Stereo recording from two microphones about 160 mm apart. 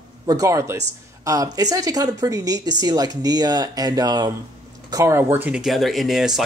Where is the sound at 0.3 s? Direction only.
20° right (ahead or behind).